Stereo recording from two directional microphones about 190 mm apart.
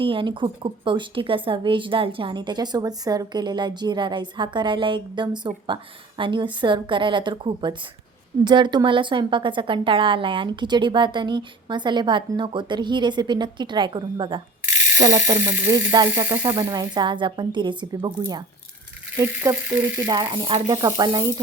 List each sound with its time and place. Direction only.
0.0 s a woman's voice: 25° right (ahead or behind)